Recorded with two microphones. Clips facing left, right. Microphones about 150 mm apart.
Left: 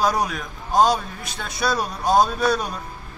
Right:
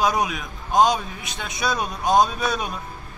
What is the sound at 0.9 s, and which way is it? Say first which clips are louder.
A man's voice: left 1 dB; 20° right (ahead or behind).